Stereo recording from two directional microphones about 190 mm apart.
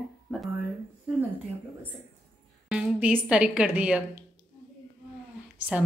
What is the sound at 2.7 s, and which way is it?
A woman's voice, 5° right (ahead or behind).